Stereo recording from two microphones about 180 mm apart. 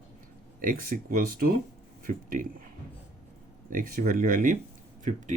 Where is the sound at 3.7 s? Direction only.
50° right (ahead or behind).